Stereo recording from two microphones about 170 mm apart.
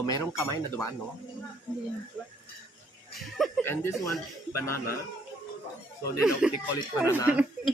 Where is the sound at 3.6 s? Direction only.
15° left (ahead or behind).